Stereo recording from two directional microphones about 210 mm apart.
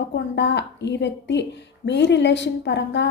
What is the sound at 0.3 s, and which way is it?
A woman's voice, 55° left (ahead or behind).